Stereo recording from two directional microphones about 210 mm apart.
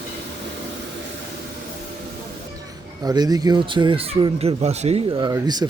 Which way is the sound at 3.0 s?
20° right (ahead or behind).